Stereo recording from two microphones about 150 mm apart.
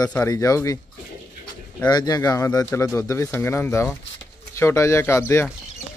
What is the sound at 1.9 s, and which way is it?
Speech, 25° left (ahead or behind).